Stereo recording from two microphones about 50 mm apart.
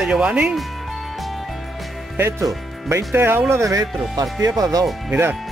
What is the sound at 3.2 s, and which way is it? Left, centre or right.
Speech, right.